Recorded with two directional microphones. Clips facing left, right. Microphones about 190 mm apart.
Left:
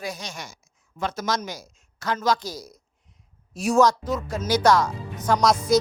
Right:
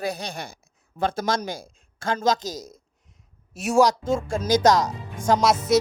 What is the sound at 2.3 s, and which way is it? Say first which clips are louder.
Speech: right 2 dB; 45° right (ahead or behind).